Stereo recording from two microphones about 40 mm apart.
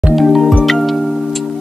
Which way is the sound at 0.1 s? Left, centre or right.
Centre.